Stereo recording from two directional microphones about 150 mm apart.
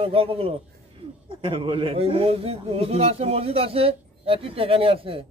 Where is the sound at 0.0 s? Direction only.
40° right (ahead or behind).